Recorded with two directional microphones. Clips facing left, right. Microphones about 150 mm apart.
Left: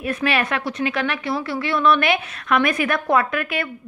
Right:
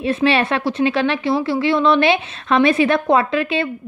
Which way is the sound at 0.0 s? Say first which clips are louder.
Right 5 dB; 25° right (ahead or behind).